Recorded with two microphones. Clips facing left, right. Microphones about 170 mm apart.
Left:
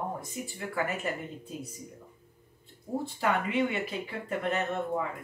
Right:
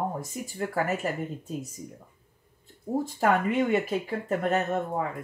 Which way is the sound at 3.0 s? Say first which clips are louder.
Right 5 dB; 45° right (ahead or behind).